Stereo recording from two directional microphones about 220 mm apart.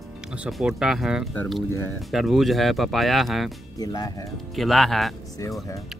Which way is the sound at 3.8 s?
15° left (ahead or behind).